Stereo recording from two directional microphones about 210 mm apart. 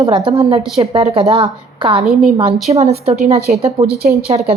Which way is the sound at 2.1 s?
Centre (ahead or behind).